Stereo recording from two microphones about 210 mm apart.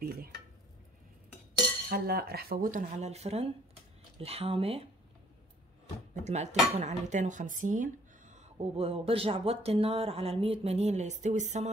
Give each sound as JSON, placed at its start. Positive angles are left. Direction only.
{"t": 0.0, "sound": "stir", "side_deg": -45}
{"t": 1.9, "sound": "speech", "side_deg": -45}
{"t": 6.1, "sound": "speech", "side_deg": -35}